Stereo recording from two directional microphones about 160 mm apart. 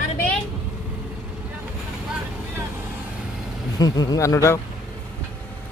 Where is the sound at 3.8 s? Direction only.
25° left (ahead or behind).